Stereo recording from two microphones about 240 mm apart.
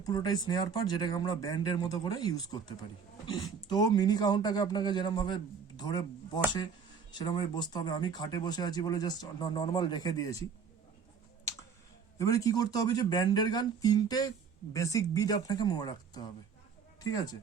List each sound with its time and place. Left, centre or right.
0.0 s speech: centre
12.1 s speech: centre